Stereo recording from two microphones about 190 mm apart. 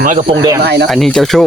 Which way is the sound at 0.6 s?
60° right (ahead or behind).